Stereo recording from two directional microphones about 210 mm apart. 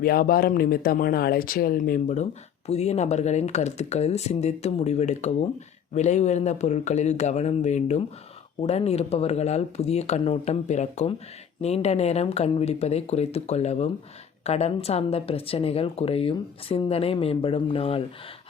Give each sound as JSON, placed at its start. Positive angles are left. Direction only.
{"t": 0.0, "sound": "a woman's voice", "side_deg": 45}